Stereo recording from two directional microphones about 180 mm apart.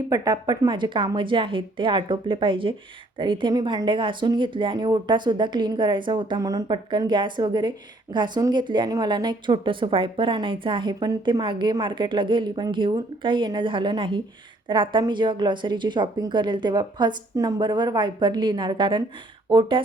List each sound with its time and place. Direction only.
0.1 s a woman's voice: 20° right (ahead or behind)